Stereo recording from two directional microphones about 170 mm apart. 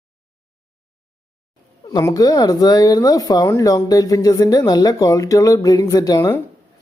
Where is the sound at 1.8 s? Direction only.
25° left (ahead or behind).